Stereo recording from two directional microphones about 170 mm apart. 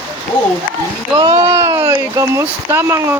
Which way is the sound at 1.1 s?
20° right (ahead or behind).